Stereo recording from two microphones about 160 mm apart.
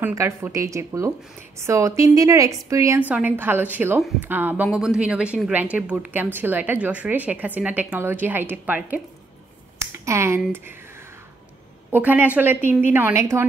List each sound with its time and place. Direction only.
0.0 s a woman's voice: 15° right (ahead or behind)
9.8 s a sound: 15° right (ahead or behind)
11.9 s a woman's voice: 10° right (ahead or behind)